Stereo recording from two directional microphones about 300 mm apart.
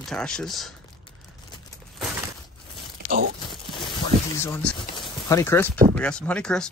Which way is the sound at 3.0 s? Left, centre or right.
Right.